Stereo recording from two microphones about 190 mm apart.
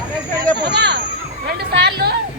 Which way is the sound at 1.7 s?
60° right (ahead or behind).